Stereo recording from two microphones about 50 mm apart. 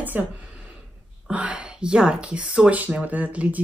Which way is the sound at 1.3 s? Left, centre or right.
Right.